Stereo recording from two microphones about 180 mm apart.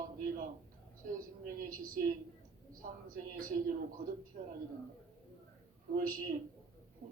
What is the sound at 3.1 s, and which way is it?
A man's voice, 50° right (ahead or behind).